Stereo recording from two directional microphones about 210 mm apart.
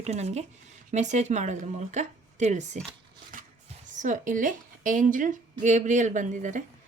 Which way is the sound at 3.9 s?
35° right (ahead or behind).